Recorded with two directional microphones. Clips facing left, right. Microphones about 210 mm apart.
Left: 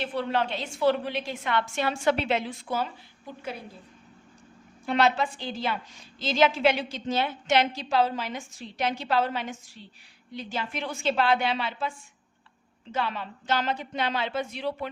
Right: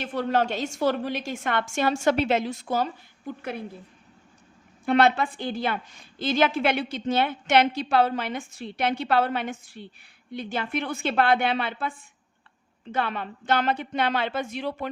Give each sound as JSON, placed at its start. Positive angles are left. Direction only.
{"t": 0.0, "sound": "a woman's voice", "side_deg": -45}
{"t": 4.9, "sound": "a woman's voice", "side_deg": -55}